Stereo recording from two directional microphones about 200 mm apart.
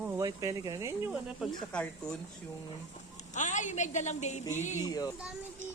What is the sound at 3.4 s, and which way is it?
A woman's voice, 40° left (ahead or behind).